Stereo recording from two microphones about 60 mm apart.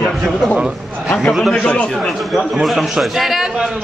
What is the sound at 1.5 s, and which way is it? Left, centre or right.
Speech, centre.